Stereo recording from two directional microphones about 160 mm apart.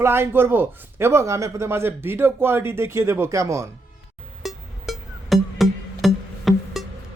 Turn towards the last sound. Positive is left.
turn(degrees=0)  # may be behind; listen again after turning